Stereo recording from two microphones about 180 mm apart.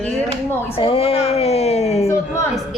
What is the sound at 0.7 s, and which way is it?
Speech, 30° left (ahead or behind).